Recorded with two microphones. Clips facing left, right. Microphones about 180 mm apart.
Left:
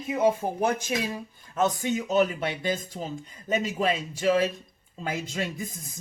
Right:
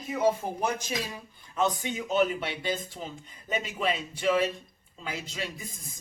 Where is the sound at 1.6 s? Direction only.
45° left (ahead or behind).